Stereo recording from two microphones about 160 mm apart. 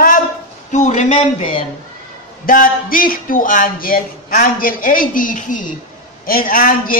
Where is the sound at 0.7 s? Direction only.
50° left (ahead or behind).